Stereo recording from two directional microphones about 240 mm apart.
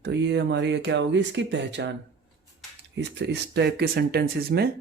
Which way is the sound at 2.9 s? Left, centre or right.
Right.